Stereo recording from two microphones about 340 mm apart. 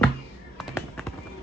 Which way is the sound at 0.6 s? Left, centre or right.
Centre.